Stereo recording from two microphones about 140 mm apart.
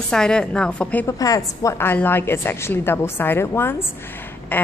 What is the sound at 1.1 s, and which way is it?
A woman's voice, 25° left (ahead or behind).